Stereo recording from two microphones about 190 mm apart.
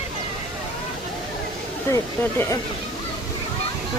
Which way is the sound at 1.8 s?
15° left (ahead or behind).